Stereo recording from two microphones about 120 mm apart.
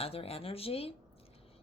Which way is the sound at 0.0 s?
55° left (ahead or behind).